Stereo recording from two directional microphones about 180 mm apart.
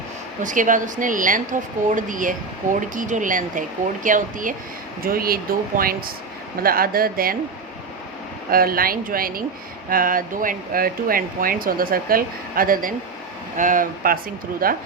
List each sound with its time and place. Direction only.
0.4 s speech: 45° right (ahead or behind)
8.4 s speech: 55° right (ahead or behind)